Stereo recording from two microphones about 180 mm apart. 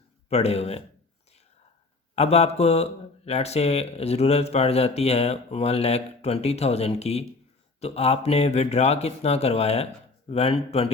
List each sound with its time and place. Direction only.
0.3 s speech: 35° left (ahead or behind)
2.1 s speech: 35° left (ahead or behind)